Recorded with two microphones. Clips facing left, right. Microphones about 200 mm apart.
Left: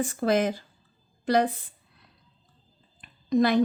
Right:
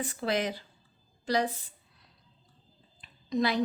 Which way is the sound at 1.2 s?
55° left (ahead or behind).